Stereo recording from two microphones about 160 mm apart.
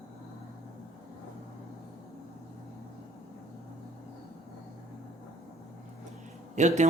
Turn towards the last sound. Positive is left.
turn(degrees=-50)  # may be behind; listen again after turning